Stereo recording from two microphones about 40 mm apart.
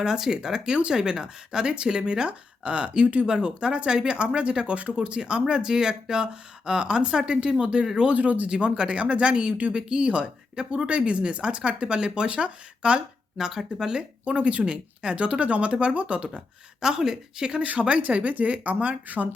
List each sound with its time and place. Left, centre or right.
0.0 s speech: centre
8.1 s speech: right
8.4 s speech: right
13.3 s speech: centre
14.3 s speech: right
16.8 s speech: centre
17.6 s speech: right